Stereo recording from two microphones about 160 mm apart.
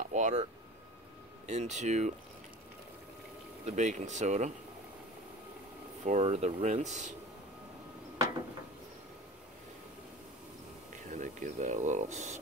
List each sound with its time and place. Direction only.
0.1 s speech: 50° right (ahead or behind)
1.5 s speech: 45° right (ahead or behind)
3.6 s speech: 50° right (ahead or behind)
6.0 s speech: 45° right (ahead or behind)
11.1 s speech: 50° right (ahead or behind)